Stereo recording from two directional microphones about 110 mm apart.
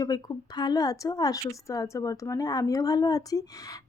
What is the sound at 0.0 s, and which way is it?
A woman's voice, 35° left (ahead or behind).